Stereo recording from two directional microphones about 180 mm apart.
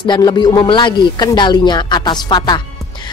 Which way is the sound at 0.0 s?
25° left (ahead or behind).